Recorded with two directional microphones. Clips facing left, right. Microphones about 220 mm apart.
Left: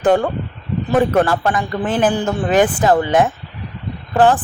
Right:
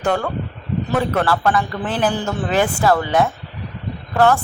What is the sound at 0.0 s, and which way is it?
Speech, 20° left (ahead or behind).